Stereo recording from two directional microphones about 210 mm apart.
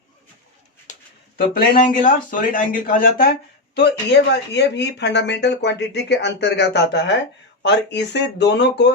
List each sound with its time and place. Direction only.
0.9 s a sound: 35° left (ahead or behind)
1.4 s speech: 45° left (ahead or behind)
3.8 s speech: 55° left (ahead or behind)